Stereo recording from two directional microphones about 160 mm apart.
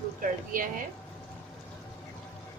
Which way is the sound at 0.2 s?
60° right (ahead or behind).